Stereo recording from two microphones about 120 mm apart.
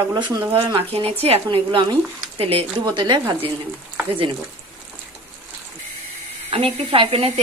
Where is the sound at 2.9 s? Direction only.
40° right (ahead or behind).